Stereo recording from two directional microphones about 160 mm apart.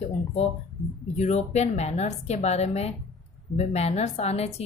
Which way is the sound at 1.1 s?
45° left (ahead or behind).